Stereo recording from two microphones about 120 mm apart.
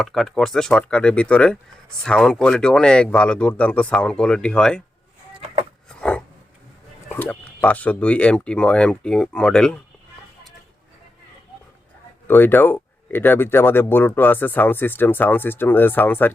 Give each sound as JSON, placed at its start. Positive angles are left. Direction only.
{"t": 0.0, "sound": "speech", "side_deg": 0}
{"t": 6.0, "sound": "a sound", "side_deg": 10}
{"t": 7.1, "sound": "speech", "side_deg": 15}
{"t": 12.3, "sound": "speech", "side_deg": 15}